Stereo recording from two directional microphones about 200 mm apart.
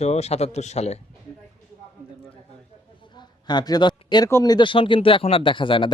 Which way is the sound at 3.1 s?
20° left (ahead or behind).